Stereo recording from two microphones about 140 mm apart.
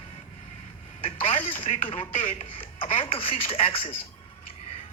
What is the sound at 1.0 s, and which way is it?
Speech, 40° left (ahead or behind).